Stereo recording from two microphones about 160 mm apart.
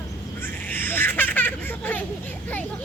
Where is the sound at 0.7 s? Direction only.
10° left (ahead or behind).